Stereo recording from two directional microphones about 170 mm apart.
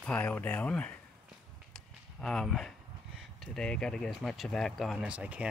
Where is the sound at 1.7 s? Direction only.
Centre (ahead or behind).